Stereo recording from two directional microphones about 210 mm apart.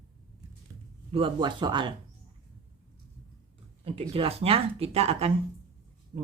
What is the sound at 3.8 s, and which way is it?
Speech, 25° right (ahead or behind).